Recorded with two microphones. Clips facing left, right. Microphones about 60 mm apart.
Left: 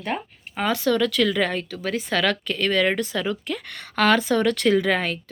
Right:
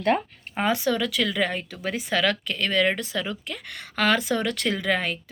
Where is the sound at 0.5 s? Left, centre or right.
Centre.